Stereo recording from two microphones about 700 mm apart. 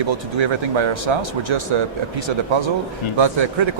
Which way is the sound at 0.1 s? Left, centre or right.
Right.